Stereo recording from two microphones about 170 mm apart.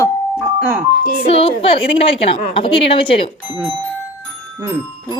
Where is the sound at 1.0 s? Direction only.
60° left (ahead or behind).